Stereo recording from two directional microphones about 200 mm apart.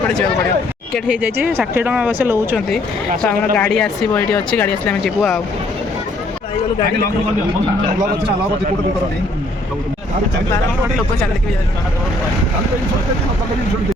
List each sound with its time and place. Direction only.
0.9 s speech: 5° right (ahead or behind)
3.1 s speech: 45° right (ahead or behind)
3.8 s speech: 5° left (ahead or behind)